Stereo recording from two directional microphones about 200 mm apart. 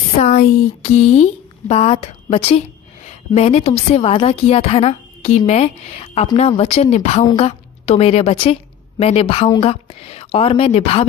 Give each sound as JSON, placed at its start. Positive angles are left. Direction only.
{"t": 0.2, "sound": "a woman's voice", "side_deg": 40}